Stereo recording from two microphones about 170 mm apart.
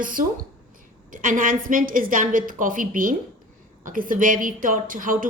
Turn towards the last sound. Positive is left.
turn(degrees=-55)  # may be behind; listen again after turning